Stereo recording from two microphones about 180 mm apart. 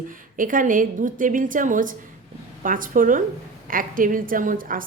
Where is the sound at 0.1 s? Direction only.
50° right (ahead or behind).